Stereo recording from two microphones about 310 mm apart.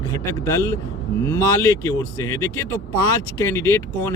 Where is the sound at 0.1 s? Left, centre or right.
Centre.